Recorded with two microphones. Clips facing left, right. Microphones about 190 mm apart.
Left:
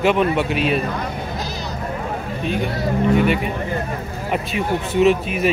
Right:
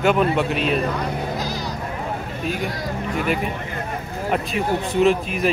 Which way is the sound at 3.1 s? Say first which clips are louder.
Left 2 dB; centre (ahead or behind).